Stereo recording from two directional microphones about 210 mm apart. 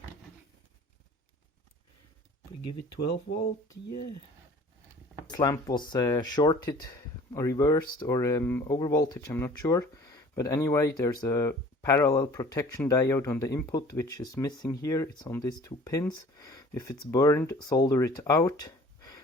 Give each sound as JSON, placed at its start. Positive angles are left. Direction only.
{"t": 5.3, "sound": "speech", "side_deg": 15}
{"t": 9.9, "sound": "a sound", "side_deg": 15}
{"t": 11.0, "sound": "speech", "side_deg": 15}